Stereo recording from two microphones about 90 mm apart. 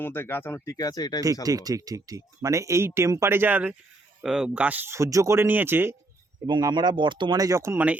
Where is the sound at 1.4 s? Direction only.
40° right (ahead or behind); by 3.7 s 15° right (ahead or behind).